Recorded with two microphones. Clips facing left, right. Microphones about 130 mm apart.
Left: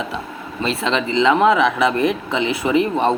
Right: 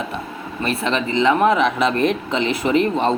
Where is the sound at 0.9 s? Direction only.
20° left (ahead or behind).